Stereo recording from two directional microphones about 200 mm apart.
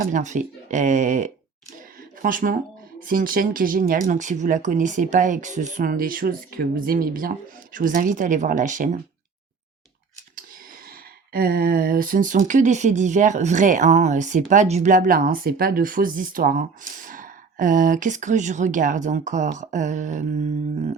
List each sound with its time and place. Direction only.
0.0 s speech: 40° right (ahead or behind)
11.3 s speech: 50° right (ahead or behind)